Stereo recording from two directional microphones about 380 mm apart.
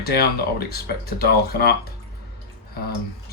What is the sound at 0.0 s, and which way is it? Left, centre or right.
Speech, left.